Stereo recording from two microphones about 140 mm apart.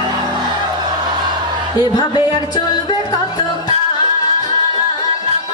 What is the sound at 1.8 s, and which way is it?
Speech, 30° left (ahead or behind).